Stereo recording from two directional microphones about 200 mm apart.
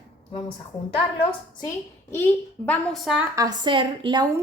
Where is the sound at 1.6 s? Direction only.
15° left (ahead or behind).